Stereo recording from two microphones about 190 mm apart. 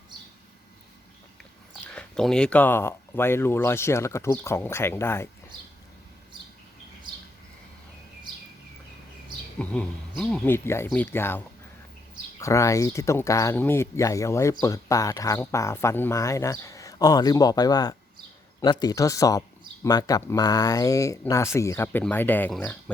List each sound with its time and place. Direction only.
1.9 s speech: 5° left (ahead or behind)
9.6 s speech: 5° left (ahead or behind)